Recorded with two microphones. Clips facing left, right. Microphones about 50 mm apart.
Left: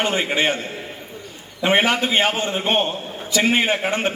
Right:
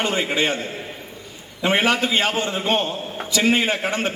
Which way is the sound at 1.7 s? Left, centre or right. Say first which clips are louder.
Left 1 dB; left.